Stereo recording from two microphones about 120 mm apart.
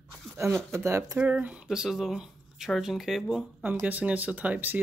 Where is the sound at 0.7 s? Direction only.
25° right (ahead or behind).